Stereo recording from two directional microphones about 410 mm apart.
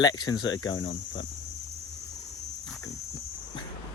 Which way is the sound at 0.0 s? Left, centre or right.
Centre.